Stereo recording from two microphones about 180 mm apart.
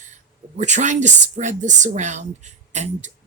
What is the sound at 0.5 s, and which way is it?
A woman's voice, 40° right (ahead or behind).